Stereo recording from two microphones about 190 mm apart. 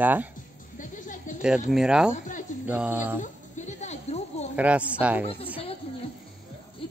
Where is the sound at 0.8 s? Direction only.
40° left (ahead or behind).